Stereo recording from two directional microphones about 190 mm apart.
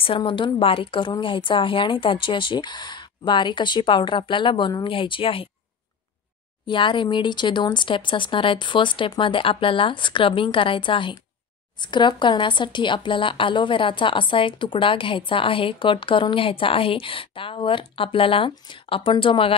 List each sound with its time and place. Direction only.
0.0 s speech: 30° left (ahead or behind)
6.7 s speech: 25° left (ahead or behind)